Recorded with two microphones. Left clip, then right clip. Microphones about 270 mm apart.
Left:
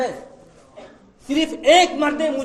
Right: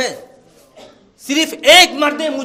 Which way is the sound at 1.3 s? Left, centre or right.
Right.